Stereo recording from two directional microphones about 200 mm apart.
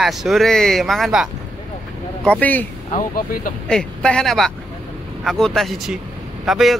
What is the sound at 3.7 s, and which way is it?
Speech, 5° left (ahead or behind).